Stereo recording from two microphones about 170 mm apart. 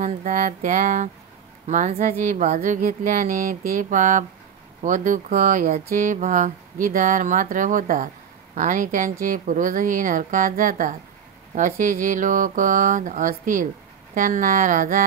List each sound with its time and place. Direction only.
0.0 s speech: 50° right (ahead or behind)